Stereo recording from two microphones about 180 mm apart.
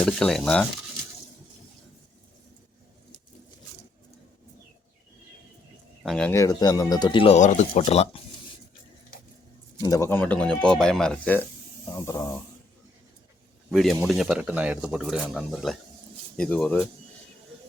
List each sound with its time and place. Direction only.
0.0 s speech: 5° left (ahead or behind)
6.0 s speech: 5° left (ahead or behind)
6.3 s speech: 20° left (ahead or behind); by 8.2 s 35° left (ahead or behind)
9.8 s speech: 20° left (ahead or behind)
13.7 s speech: centre (ahead or behind)